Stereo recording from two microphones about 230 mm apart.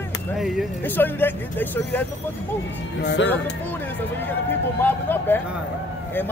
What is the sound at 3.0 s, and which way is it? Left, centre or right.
Speech, left.